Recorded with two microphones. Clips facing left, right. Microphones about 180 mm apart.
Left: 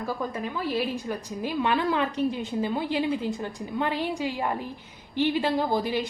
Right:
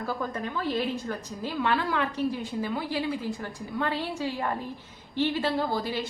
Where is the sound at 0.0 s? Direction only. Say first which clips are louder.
Left 1 dB; 10° left (ahead or behind).